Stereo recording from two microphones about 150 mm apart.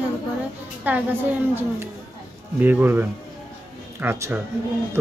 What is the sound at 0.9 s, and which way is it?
Speech, 10° right (ahead or behind).